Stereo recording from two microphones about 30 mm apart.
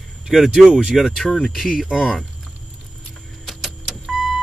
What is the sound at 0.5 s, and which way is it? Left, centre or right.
Speech, right.